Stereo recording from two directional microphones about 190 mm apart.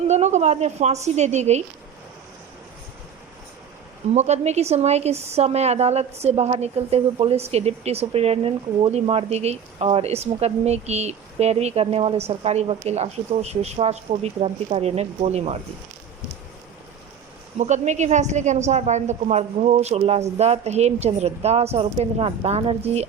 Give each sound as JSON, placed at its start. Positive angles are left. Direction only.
{"t": 0.1, "sound": "a woman's voice", "side_deg": -35}
{"t": 4.1, "sound": "a woman's voice", "side_deg": -35}
{"t": 17.6, "sound": "a woman's voice", "side_deg": -40}